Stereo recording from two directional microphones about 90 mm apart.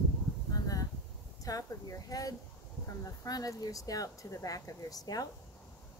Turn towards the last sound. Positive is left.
turn(degrees=45)  # may be behind; listen again after turning